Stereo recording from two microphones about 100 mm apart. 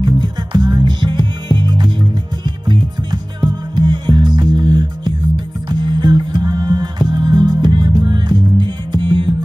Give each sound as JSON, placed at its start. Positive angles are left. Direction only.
{"t": 0.0, "sound": "music", "side_deg": -50}